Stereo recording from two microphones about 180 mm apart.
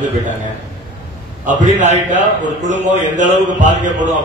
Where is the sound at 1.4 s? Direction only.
45° right (ahead or behind).